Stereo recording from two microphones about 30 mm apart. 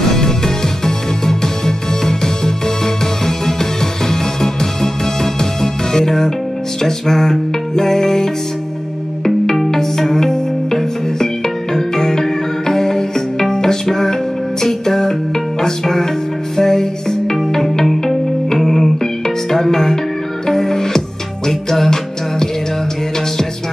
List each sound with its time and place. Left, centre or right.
0.1 s music: centre
9.7 s music: centre